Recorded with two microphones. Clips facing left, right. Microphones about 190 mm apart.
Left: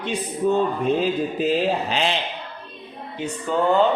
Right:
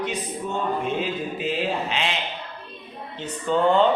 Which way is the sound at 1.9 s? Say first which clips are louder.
Left 4 dB; 35° left (ahead or behind).